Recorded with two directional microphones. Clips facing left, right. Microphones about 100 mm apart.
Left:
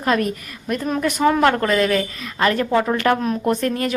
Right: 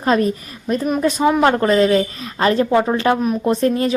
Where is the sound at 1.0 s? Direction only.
15° right (ahead or behind).